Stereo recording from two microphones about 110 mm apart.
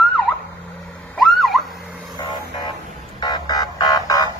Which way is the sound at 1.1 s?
Centre (ahead or behind).